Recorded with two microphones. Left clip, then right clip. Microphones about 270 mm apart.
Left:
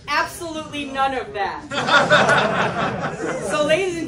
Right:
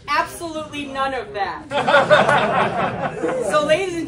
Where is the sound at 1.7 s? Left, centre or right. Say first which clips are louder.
Right 1 dB; right.